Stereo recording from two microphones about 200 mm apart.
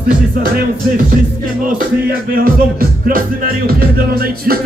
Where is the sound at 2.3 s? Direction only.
45° right (ahead or behind).